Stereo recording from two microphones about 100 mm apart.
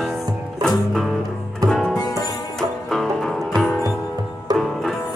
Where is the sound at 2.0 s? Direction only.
35° left (ahead or behind).